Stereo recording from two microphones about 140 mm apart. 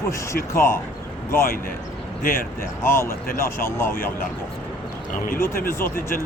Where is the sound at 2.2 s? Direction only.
90° left.